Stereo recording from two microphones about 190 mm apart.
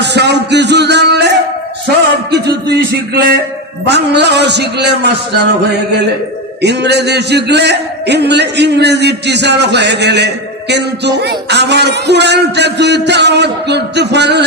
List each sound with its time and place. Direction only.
0.0 s music: 65° right (ahead or behind)
2.3 s a man's voice: 60° right (ahead or behind)
6.6 s a man's voice: 60° right (ahead or behind)